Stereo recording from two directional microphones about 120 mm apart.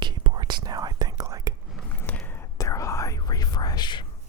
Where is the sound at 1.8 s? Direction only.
10° left (ahead or behind).